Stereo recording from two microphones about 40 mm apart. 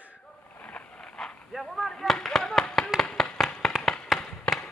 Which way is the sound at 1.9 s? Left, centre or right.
Centre.